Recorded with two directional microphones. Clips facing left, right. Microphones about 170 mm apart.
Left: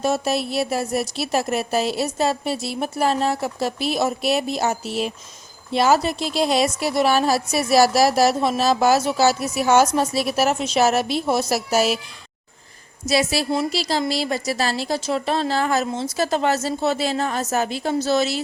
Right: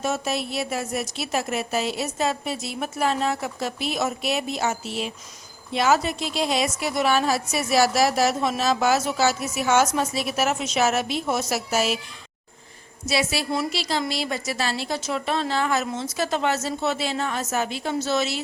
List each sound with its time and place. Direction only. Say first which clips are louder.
0.0 s a woman's voice: left 5 dB; 35° left (ahead or behind)
13.1 s a woman's voice: left 4 dB; 40° left (ahead or behind)